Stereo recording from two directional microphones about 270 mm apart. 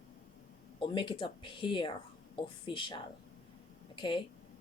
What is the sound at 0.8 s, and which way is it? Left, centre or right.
Speech, centre.